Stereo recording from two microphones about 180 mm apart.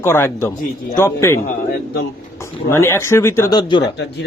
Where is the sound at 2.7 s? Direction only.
15° left (ahead or behind).